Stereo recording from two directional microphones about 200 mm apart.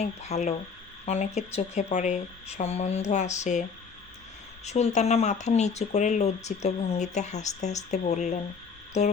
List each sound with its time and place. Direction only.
0.0 s speech: 35° left (ahead or behind)